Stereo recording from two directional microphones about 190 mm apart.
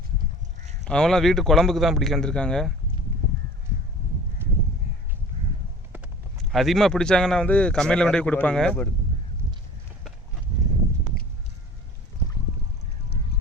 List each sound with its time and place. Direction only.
0.9 s speech: 5° left (ahead or behind)
4.4 s honk: 10° right (ahead or behind)
6.3 s speech: centre (ahead or behind)